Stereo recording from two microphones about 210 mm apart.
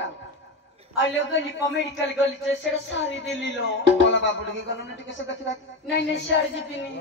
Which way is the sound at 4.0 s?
60° left (ahead or behind).